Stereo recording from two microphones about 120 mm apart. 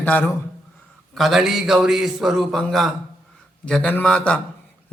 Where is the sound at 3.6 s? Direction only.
10° left (ahead or behind).